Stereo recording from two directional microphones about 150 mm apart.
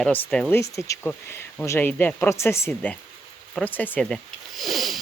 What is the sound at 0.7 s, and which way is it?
Speech, 20° left (ahead or behind).